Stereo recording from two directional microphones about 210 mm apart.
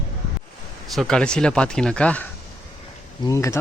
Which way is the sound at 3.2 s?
15° left (ahead or behind).